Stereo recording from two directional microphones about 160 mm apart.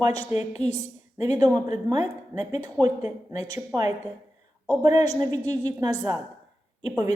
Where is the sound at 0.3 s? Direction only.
45° left (ahead or behind).